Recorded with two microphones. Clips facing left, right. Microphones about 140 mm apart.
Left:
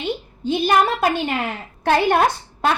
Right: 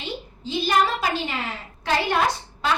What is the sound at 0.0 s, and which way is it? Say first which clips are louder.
A woman's voice: left 8 dB; 55° left (ahead or behind).